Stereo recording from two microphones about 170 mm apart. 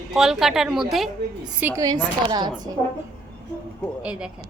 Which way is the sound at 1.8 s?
25° right (ahead or behind).